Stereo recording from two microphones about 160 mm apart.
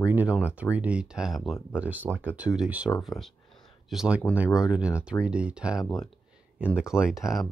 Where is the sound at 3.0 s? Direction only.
Centre (ahead or behind).